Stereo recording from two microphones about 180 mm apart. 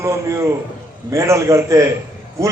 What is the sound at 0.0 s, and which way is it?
A man's voice, 15° right (ahead or behind).